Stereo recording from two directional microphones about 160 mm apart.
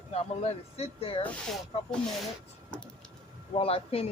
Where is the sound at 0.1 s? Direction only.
40° left (ahead or behind).